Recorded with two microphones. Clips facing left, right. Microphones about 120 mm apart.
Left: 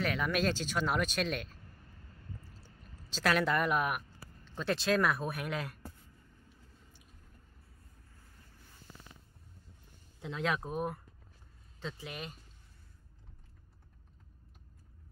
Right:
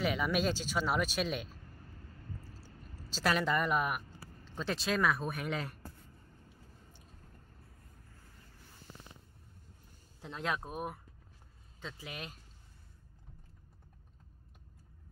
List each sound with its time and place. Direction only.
0.0 s speech: 5° right (ahead or behind)
3.1 s speech: 5° right (ahead or behind)
10.2 s speech: centre (ahead or behind)